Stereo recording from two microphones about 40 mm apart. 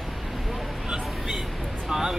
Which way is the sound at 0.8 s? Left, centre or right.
Right.